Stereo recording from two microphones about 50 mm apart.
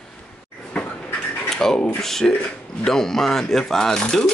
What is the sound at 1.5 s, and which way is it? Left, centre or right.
Rub, centre.